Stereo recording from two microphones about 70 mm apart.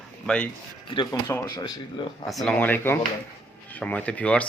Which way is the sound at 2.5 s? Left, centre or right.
Left.